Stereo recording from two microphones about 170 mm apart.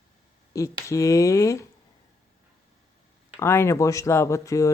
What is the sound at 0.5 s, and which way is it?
Speech, 20° left (ahead or behind).